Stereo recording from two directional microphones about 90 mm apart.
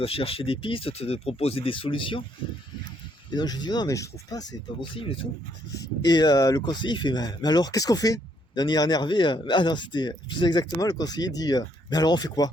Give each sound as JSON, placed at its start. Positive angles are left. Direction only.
{"t": 0.0, "sound": "speech", "side_deg": 90}
{"t": 3.3, "sound": "speech", "side_deg": 50}
{"t": 4.8, "sound": "speech", "side_deg": 85}
{"t": 5.8, "sound": "speech", "side_deg": 50}
{"t": 6.7, "sound": "speech", "side_deg": 60}
{"t": 10.8, "sound": "speech", "side_deg": 45}